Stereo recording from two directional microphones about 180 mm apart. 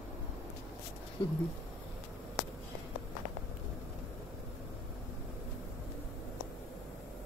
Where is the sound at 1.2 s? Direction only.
25° left (ahead or behind).